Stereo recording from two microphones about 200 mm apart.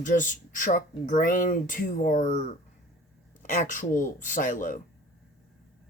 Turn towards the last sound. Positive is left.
turn(degrees=40)  # may be behind; listen again after turning